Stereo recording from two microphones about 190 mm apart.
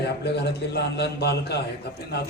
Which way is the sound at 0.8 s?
60° left (ahead or behind).